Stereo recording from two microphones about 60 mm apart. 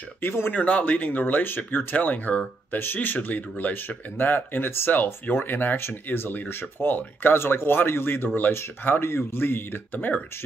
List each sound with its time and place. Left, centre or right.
0.2 s speech: left